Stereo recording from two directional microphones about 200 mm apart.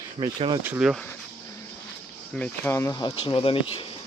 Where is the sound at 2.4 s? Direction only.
10° left (ahead or behind); by 3.8 s 25° left (ahead or behind).